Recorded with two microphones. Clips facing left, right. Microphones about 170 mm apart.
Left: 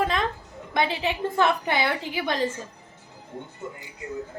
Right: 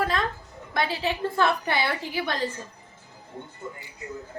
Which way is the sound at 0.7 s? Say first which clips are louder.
Left 2 dB; 20° left (ahead or behind).